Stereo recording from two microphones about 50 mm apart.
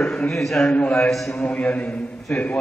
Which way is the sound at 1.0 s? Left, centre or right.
Centre.